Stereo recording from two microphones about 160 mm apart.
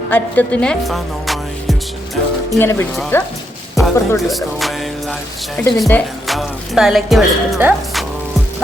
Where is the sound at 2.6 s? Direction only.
15° left (ahead or behind).